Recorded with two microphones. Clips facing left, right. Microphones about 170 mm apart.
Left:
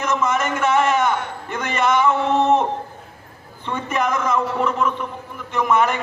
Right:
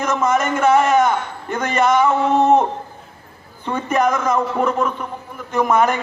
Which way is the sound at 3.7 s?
40° right (ahead or behind).